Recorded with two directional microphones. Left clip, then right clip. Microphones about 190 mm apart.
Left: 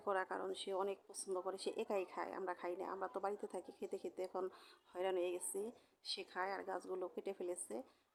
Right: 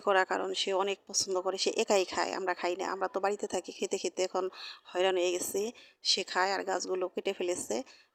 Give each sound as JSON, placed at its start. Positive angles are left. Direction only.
{"t": 0.0, "sound": "speech", "side_deg": -35}